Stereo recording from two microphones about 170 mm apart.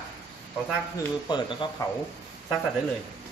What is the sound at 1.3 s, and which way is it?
Speech, 30° left (ahead or behind).